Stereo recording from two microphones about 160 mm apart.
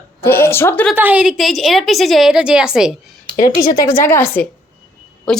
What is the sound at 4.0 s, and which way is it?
Speech, 15° left (ahead or behind).